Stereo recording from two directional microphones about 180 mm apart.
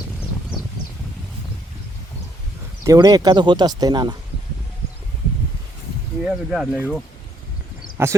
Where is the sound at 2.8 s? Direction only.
20° right (ahead or behind).